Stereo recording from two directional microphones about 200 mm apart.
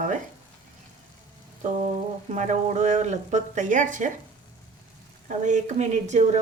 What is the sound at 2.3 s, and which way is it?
A woman's voice, 35° right (ahead or behind).